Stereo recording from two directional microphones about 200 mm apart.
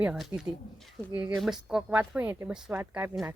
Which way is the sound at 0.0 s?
5° right (ahead or behind).